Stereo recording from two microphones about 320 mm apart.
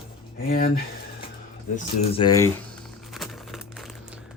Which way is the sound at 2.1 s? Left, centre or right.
Centre.